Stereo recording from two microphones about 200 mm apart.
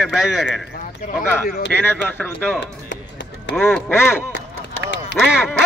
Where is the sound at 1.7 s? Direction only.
5° left (ahead or behind).